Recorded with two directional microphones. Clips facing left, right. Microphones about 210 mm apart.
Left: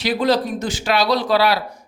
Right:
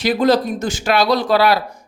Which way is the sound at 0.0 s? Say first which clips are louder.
Right 3 dB; 45° right (ahead or behind).